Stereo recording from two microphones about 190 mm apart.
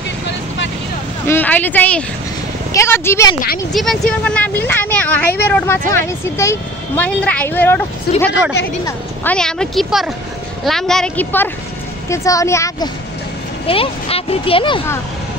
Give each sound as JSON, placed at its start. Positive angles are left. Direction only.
{"t": 1.2, "sound": "speech", "side_deg": 10}
{"t": 3.7, "sound": "speech", "side_deg": 0}
{"t": 8.1, "sound": "a woman's voice", "side_deg": 50}
{"t": 8.8, "sound": "speech", "side_deg": 10}
{"t": 13.7, "sound": "speech", "side_deg": 30}